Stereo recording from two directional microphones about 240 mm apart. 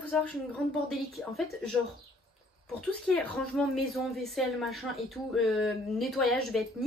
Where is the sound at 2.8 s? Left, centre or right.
Centre.